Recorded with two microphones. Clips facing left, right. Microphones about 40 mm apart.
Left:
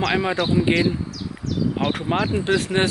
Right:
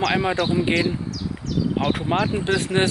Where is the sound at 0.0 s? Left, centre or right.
Centre.